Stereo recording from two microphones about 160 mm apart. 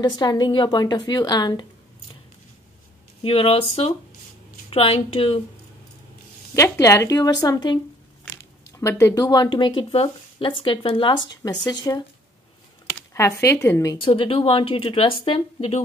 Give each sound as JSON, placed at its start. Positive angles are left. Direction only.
{"t": 0.0, "sound": "speech", "side_deg": 25}
{"t": 3.2, "sound": "speech", "side_deg": 35}
{"t": 6.5, "sound": "speech", "side_deg": 20}
{"t": 13.1, "sound": "a woman's voice", "side_deg": 20}
{"t": 13.9, "sound": "speech", "side_deg": 35}